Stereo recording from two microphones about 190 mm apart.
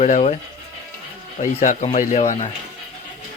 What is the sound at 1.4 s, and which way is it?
Speech, 35° left (ahead or behind).